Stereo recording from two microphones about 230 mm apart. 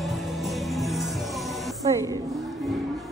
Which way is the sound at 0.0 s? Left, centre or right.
Centre.